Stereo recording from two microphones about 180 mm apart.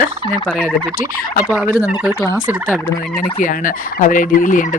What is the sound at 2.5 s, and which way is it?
Fowl, 10° right (ahead or behind).